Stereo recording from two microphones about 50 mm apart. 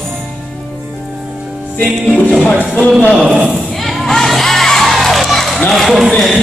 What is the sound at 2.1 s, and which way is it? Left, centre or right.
Music, left.